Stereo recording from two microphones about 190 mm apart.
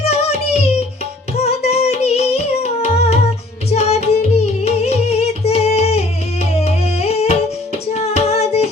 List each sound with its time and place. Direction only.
0.0 s music: 35° left (ahead or behind)
7.0 s music: 35° left (ahead or behind)